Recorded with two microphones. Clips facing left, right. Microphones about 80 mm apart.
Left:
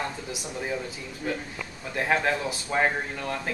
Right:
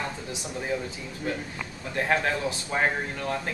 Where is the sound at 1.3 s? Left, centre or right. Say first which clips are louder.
Even; centre.